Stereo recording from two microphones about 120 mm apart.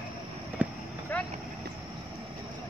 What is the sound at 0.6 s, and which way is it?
Clip-clop, 15° right (ahead or behind).